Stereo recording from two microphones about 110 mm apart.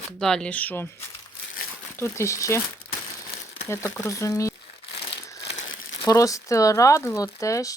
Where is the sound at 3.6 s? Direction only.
25° left (ahead or behind).